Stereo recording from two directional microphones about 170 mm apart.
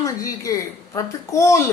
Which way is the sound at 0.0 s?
20° left (ahead or behind).